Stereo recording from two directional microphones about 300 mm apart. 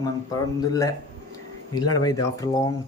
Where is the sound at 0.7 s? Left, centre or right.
Centre.